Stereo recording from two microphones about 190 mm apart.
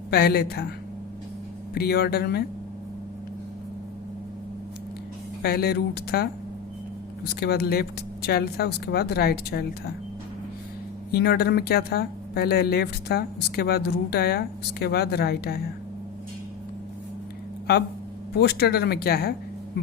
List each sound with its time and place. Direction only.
0.1 s speech: 55° left (ahead or behind)
1.7 s speech: 55° left (ahead or behind)
5.4 s speech: 55° left (ahead or behind)
7.3 s speech: 55° left (ahead or behind)
11.1 s speech: 55° left (ahead or behind)
18.3 s speech: 60° left (ahead or behind)